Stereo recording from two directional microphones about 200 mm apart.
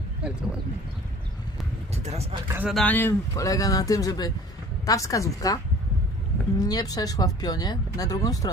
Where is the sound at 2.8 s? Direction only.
10° left (ahead or behind).